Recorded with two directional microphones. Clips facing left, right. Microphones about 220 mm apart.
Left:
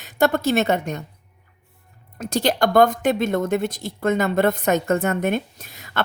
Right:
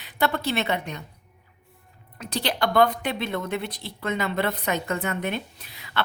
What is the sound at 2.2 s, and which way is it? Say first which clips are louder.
A woman's voice: left 6 dB; 45° left (ahead or behind).